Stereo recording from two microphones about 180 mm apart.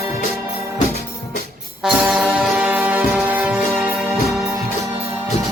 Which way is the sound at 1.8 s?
5° right (ahead or behind).